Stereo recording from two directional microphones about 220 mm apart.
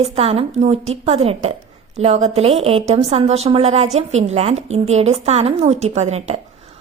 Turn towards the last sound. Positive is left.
turn(degrees=-30)  # may be behind; listen again after turning